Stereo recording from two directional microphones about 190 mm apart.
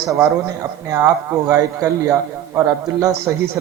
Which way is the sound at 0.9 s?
15° right (ahead or behind).